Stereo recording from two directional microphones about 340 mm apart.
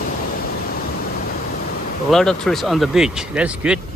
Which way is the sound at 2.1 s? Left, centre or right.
Centre.